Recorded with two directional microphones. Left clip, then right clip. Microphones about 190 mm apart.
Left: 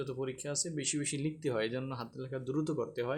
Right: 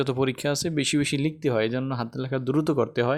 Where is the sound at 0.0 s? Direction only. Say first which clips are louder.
Right 13 dB; 40° right (ahead or behind).